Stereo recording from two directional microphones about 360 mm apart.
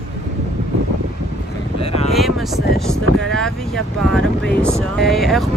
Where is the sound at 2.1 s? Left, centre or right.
Centre.